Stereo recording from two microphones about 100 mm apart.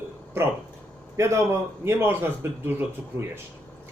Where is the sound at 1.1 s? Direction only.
30° right (ahead or behind).